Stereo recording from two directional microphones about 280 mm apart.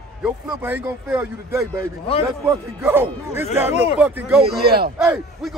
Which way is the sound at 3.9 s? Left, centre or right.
Centre.